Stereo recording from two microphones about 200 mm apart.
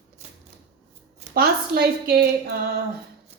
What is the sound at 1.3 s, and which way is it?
A woman's voice, 50° right (ahead or behind).